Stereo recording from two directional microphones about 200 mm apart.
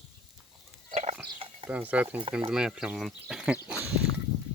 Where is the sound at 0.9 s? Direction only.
35° right (ahead or behind).